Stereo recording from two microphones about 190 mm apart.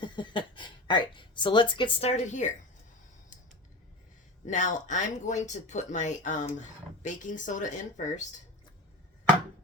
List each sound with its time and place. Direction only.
0.0 s a woman's voice: 25° left (ahead or behind)
4.4 s speech: 40° left (ahead or behind)